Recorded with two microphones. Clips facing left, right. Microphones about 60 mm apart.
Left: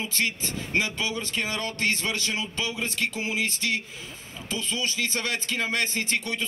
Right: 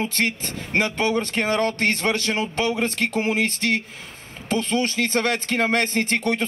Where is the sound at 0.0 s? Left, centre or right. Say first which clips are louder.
Right 5 dB; right.